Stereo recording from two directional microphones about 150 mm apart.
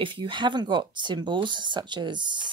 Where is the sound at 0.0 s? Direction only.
35° right (ahead or behind).